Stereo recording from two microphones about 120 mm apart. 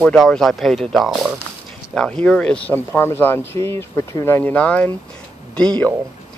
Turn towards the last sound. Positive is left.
turn(degrees=10)  # may be behind; listen again after turning